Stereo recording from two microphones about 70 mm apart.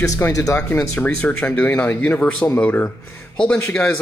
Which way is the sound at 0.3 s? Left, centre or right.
Left.